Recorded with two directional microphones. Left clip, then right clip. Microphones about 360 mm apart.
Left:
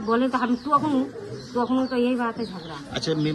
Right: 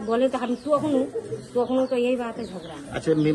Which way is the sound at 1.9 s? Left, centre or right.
Centre.